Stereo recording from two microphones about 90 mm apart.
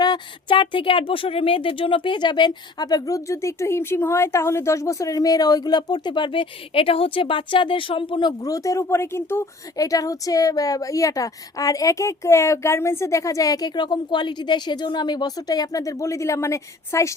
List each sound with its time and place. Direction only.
0.0 s speech: 55° left (ahead or behind)
8.4 s speech: 40° left (ahead or behind)
9.7 s speech: 40° left (ahead or behind)